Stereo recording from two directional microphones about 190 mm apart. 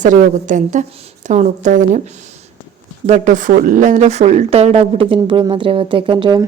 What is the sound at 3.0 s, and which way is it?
A woman's voice, 40° right (ahead or behind).